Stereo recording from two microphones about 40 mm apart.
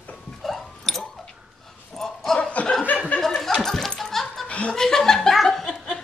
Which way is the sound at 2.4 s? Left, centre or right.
Left.